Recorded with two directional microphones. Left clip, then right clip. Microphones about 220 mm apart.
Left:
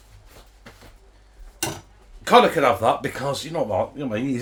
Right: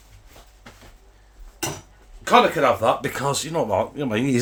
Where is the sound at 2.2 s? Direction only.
25° left (ahead or behind).